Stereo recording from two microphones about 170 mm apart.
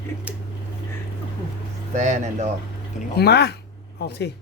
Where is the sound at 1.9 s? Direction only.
45° right (ahead or behind).